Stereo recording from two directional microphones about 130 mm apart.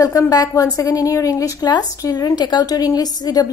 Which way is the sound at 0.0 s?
30° left (ahead or behind).